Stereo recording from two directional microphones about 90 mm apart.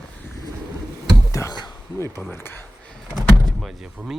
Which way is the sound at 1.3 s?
35° left (ahead or behind).